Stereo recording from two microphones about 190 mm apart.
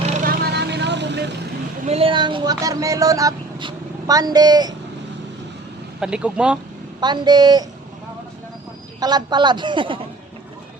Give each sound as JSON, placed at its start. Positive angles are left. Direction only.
{"t": 0.0, "sound": "vehicle", "side_deg": -45}
{"t": 1.9, "sound": "speech", "side_deg": -30}
{"t": 6.0, "sound": "speech", "side_deg": -5}
{"t": 7.0, "sound": "a man's voice", "side_deg": -20}
{"t": 9.0, "sound": "a man's voice", "side_deg": -20}